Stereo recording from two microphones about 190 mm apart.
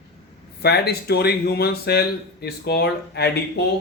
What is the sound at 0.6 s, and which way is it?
Speech, 55° left (ahead or behind).